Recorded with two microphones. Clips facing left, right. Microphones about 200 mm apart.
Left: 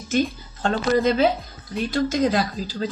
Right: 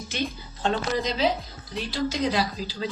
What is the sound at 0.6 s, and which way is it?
Speech, 50° left (ahead or behind).